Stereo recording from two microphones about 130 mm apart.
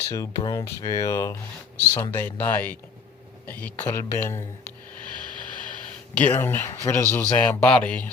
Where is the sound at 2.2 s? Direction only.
15° left (ahead or behind).